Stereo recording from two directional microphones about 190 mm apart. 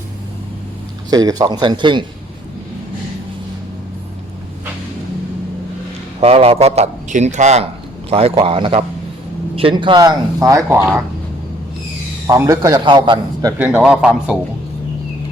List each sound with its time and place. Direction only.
1.1 s speech: 20° right (ahead or behind)
6.1 s a man's voice: 30° right (ahead or behind); by 10.8 s 15° right (ahead or behind)
12.3 s speech: 15° right (ahead or behind)
13.6 s a man's voice: 5° right (ahead or behind)